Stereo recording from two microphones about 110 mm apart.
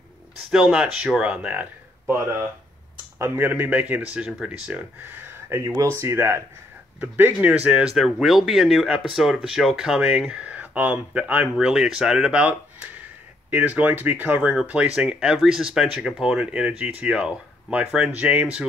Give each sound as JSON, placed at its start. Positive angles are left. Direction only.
{"t": 0.5, "sound": "speech", "side_deg": -5}
{"t": 3.2, "sound": "speech", "side_deg": -20}
{"t": 4.6, "sound": "speech", "side_deg": -15}